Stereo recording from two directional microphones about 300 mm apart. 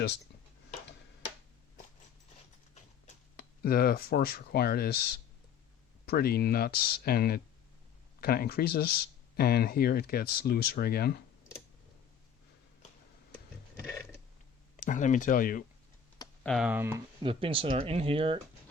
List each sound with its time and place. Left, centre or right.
3.3 s speech: left
6.1 s speech: left
13.7 s mechanisms: centre
14.8 s speech: left
16.1 s computer keyboard: centre
16.5 s speech: centre